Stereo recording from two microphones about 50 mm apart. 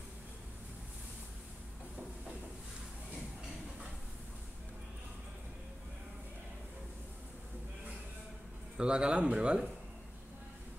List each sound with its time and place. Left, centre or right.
8.7 s speech: centre